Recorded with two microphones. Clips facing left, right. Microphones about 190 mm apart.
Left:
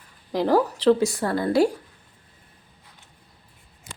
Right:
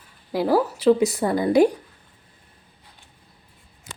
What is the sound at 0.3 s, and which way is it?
A woman's voice, 5° right (ahead or behind).